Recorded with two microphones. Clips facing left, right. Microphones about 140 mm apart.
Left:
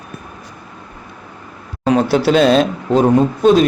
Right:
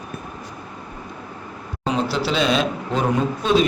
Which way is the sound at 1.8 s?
50° left (ahead or behind).